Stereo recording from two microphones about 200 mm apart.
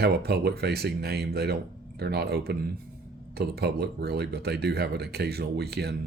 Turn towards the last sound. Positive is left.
turn(degrees=-55)  # may be behind; listen again after turning